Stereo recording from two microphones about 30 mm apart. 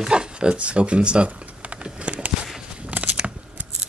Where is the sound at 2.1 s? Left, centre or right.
Right.